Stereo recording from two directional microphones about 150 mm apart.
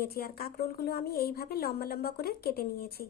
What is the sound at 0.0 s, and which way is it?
A woman's voice, 90° left.